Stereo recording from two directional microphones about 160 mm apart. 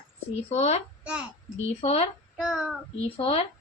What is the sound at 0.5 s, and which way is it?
Speech, 45° left (ahead or behind).